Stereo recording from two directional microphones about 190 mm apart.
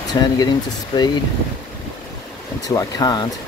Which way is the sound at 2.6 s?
20° left (ahead or behind).